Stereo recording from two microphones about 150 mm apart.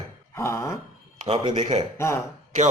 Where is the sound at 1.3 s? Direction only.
35° right (ahead or behind).